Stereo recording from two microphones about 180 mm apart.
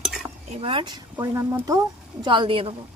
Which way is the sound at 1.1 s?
15° right (ahead or behind).